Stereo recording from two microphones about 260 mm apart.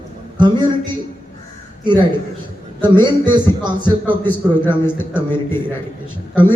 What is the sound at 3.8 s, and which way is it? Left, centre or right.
A man's voice, centre.